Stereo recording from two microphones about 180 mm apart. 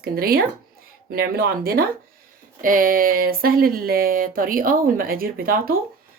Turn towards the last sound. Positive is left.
turn(degrees=-55)  # may be behind; listen again after turning